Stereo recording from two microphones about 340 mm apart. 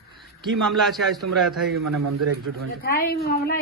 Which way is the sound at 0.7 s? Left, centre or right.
Centre.